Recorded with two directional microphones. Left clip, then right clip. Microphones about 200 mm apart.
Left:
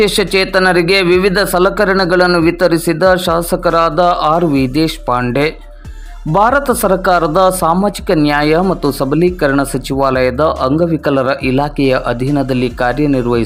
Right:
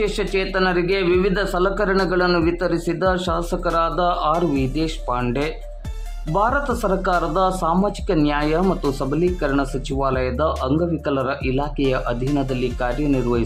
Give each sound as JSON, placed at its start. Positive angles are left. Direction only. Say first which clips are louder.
{"t": 0.0, "sound": "speech", "louder": "left 10 dB", "side_deg": 30}
{"t": 6.3, "sound": "speech", "louder": "left 9 dB", "side_deg": 25}
{"t": 13.1, "sound": "speech", "louder": "left 7 dB", "side_deg": 20}